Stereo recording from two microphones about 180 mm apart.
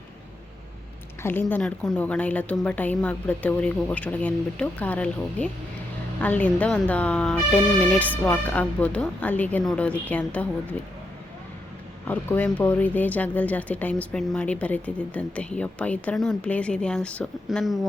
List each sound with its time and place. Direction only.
1.2 s speech: 10° left (ahead or behind)
12.0 s speech: 10° left (ahead or behind)